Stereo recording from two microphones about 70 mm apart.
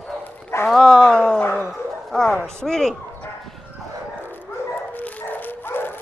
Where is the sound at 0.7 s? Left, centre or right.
Centre.